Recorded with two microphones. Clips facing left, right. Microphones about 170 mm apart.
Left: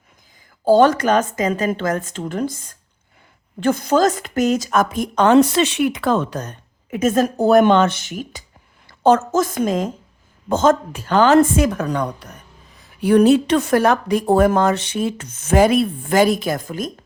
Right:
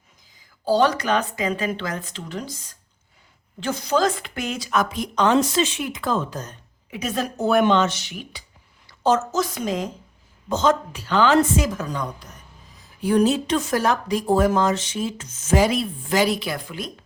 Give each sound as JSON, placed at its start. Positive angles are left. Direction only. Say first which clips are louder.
{"t": 0.6, "sound": "speech", "louder": "left 6 dB", "side_deg": 50}
{"t": 8.9, "sound": "speech", "louder": "left 6 dB", "side_deg": 55}